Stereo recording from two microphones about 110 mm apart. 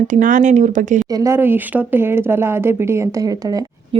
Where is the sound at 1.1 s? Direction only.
25° right (ahead or behind).